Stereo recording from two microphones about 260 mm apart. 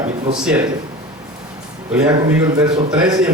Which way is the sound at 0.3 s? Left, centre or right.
Centre.